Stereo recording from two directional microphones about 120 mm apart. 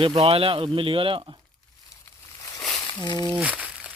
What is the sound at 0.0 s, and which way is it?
Speech, 50° right (ahead or behind).